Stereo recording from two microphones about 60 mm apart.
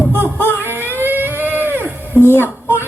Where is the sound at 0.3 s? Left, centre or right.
Left.